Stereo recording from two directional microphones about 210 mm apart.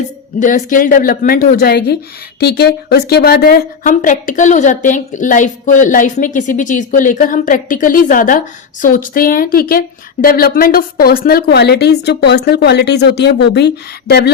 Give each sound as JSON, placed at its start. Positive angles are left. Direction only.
{"t": 0.3, "sound": "a woman's voice", "side_deg": 40}